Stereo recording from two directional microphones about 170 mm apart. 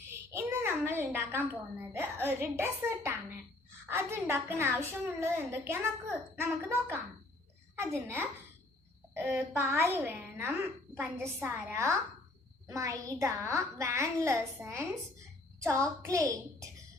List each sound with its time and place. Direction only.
0.1 s a child's voice: 15° right (ahead or behind)
15.6 s child singing: 20° right (ahead or behind)